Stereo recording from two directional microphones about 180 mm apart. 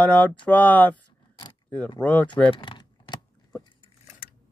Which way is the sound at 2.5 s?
25° left (ahead or behind).